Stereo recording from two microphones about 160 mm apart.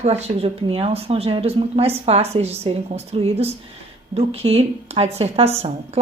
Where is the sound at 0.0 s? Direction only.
40° right (ahead or behind).